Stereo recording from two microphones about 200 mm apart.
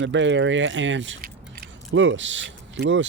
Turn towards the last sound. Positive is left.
turn(degrees=-65)  # may be behind; listen again after turning